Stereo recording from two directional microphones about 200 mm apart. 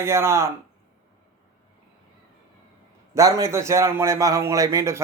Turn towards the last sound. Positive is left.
turn(degrees=-15)  # may be behind; listen again after turning